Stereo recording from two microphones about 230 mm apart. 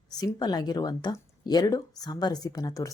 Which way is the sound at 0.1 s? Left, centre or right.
Centre.